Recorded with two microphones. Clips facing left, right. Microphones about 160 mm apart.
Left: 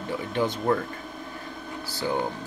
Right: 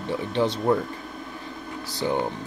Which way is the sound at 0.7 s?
20° right (ahead or behind).